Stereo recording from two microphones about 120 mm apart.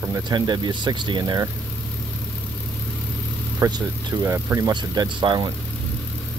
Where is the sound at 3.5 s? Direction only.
35° right (ahead or behind).